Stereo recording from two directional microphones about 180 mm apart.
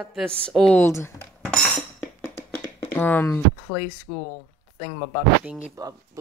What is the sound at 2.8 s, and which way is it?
Speech, 10° left (ahead or behind).